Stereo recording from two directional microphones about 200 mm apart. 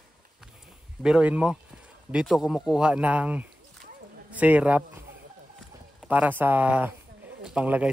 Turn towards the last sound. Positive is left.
turn(degrees=-5)  # may be behind; listen again after turning